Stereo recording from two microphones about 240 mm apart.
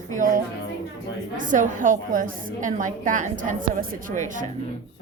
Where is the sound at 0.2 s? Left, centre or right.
Right.